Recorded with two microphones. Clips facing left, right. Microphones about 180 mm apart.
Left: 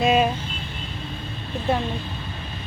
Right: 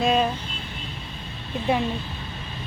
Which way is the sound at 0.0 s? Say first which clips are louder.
Left 2 dB; 5° left (ahead or behind).